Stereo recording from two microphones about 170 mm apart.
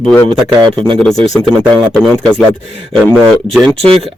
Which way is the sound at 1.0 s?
5° left (ahead or behind).